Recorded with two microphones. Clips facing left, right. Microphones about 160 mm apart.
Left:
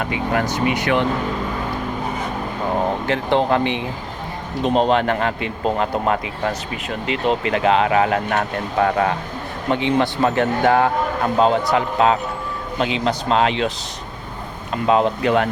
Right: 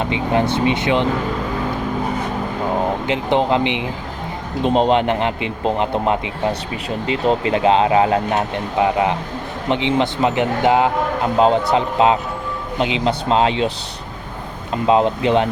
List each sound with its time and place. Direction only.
0.0 s speech: 25° right (ahead or behind)
3.1 s speech: 20° right (ahead or behind)